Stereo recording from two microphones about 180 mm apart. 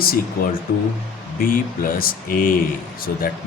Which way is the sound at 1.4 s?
50° left (ahead or behind).